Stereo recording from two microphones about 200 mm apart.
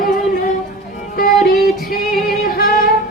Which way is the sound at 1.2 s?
45° left (ahead or behind).